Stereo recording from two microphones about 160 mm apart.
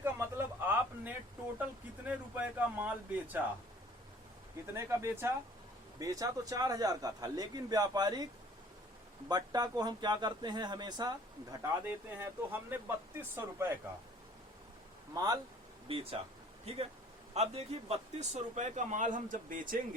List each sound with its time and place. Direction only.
0.0 s a sound: 15° right (ahead or behind)
2.0 s speech: 10° right (ahead or behind)
4.6 s a man's voice: 20° right (ahead or behind)
9.3 s a man's voice: 25° right (ahead or behind)
11.9 s speech: 15° right (ahead or behind)
15.1 s a man's voice: 25° right (ahead or behind)
15.9 s speech: 35° right (ahead or behind)
17.3 s speech: 40° right (ahead or behind); by 20.0 s 55° right (ahead or behind)